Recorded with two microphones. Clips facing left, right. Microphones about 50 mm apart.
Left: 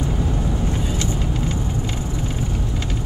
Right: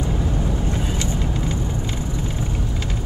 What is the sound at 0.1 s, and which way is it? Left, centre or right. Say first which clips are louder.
Vehicle: even; centre.